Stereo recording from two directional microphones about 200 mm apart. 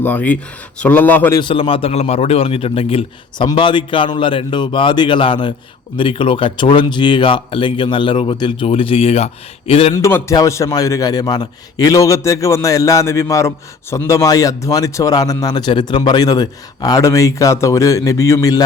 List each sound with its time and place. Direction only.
0.0 s a man's voice: 10° left (ahead or behind)
1.4 s a man's voice: 25° left (ahead or behind)
9.9 s a man's voice: 15° left (ahead or behind)